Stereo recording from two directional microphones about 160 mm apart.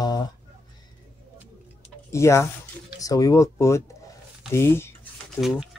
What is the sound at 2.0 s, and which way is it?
Speech, 20° left (ahead or behind).